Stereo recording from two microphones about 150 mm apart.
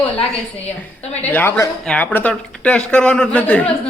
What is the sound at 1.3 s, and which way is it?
A woman's voice, 15° left (ahead or behind).